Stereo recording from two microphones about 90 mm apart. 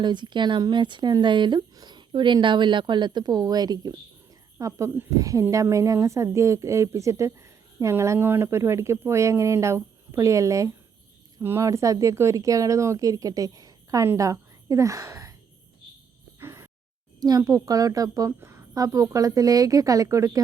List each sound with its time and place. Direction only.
0.0 s a woman's voice: 55° right (ahead or behind); by 15.4 s 35° right (ahead or behind)
16.4 s music: 30° right (ahead or behind)
17.2 s a woman's voice: 45° right (ahead or behind)
18.3 s a woman's voice: 30° right (ahead or behind)
18.7 s a woman's voice: 40° right (ahead or behind)